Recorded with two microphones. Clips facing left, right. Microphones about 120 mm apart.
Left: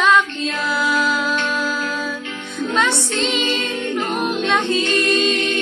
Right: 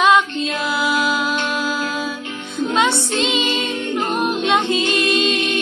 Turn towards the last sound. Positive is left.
turn(degrees=-20)  # may be behind; listen again after turning